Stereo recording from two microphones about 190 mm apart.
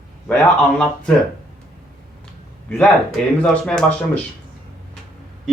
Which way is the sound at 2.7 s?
5° left (ahead or behind).